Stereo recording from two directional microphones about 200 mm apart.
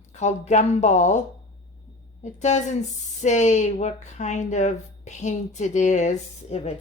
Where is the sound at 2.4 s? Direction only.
35° left (ahead or behind).